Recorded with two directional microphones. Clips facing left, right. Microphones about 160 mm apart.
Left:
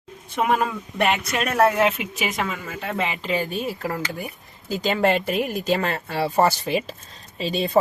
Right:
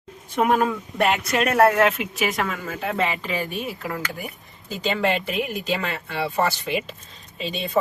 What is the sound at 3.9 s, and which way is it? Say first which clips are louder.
Speech: left 2 dB; centre (ahead or behind).